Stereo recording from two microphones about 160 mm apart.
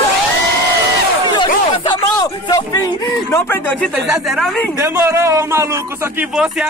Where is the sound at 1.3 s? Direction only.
30° left (ahead or behind); by 3.9 s 10° left (ahead or behind).